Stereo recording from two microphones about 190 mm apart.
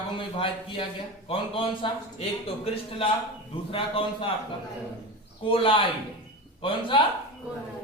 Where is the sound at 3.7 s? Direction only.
30° left (ahead or behind).